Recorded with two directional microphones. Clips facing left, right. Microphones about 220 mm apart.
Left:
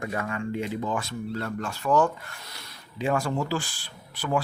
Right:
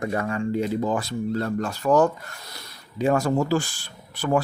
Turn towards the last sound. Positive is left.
turn(degrees=-45)  # may be behind; listen again after turning